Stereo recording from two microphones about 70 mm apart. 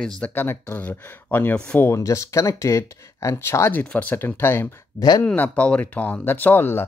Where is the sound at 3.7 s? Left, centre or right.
Left.